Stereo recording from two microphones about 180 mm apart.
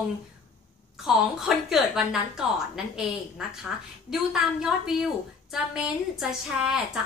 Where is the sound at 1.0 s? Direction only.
Centre (ahead or behind).